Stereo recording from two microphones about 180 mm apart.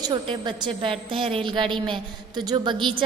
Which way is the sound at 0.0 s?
25° right (ahead or behind).